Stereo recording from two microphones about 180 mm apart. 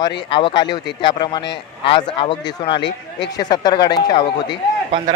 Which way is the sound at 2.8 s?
80° left.